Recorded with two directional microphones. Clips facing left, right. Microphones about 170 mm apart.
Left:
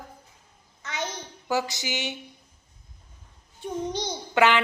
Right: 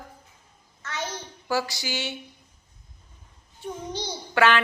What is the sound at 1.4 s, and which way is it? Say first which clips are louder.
Speech: even; 20° left (ahead or behind).